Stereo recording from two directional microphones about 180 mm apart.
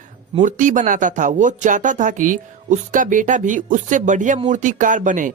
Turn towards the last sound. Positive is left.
turn(degrees=-45)  # may be behind; listen again after turning